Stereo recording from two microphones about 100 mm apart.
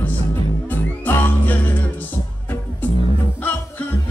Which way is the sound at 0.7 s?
20° left (ahead or behind).